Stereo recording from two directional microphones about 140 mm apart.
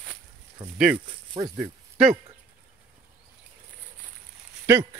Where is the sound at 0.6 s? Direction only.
35° right (ahead or behind).